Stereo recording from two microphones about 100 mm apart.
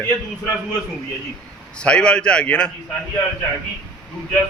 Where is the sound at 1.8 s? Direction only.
10° left (ahead or behind).